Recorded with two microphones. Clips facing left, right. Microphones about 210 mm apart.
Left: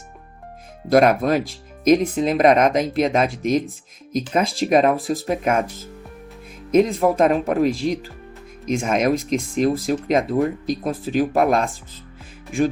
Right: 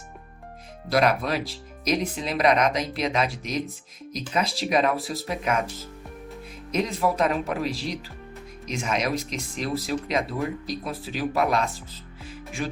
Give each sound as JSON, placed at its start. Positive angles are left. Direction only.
{"t": 0.9, "sound": "speech", "side_deg": 50}
{"t": 6.7, "sound": "speech", "side_deg": 50}